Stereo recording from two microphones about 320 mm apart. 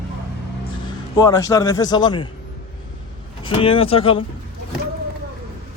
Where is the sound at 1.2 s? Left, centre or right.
Centre.